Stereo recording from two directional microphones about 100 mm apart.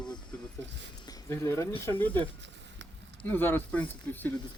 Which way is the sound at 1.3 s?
30° left (ahead or behind).